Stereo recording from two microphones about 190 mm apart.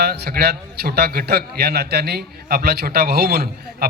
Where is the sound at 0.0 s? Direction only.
55° right (ahead or behind).